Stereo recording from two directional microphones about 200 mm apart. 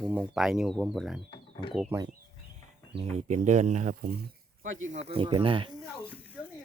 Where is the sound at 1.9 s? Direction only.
10° right (ahead or behind).